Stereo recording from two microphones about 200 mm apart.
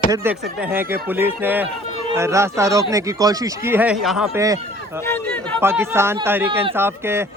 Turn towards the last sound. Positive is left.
turn(degrees=-10)  # may be behind; listen again after turning